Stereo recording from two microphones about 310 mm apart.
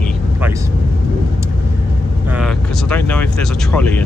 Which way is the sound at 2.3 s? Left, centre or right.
Centre.